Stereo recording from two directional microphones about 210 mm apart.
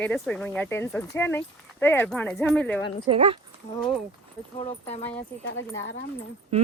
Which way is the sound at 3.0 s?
25° right (ahead or behind).